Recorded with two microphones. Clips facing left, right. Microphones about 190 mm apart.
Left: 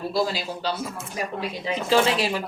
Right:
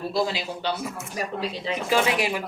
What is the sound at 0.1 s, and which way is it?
Speech, 20° right (ahead or behind).